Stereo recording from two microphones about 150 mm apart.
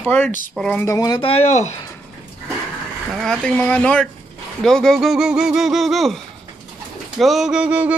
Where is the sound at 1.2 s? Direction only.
45° left (ahead or behind).